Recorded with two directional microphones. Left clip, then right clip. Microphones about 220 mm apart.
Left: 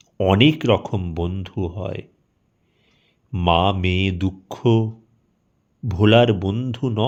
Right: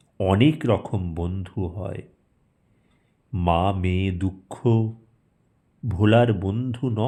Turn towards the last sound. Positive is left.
turn(degrees=15)  # may be behind; listen again after turning